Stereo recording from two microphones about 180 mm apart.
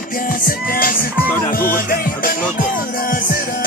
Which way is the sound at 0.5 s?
55° left (ahead or behind).